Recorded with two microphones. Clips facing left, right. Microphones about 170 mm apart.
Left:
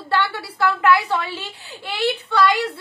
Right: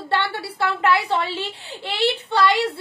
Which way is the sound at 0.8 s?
30° right (ahead or behind).